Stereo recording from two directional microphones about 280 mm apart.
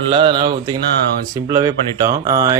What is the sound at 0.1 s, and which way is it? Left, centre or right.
Speech, centre.